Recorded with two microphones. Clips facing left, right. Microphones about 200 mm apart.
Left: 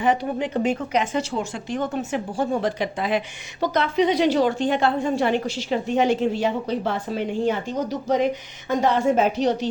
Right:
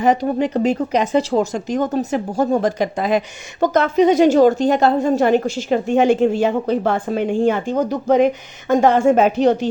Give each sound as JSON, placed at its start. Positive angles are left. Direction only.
{"t": 0.0, "sound": "speech", "side_deg": -40}